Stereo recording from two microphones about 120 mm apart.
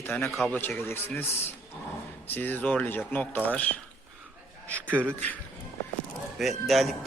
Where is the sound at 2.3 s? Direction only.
15° left (ahead or behind).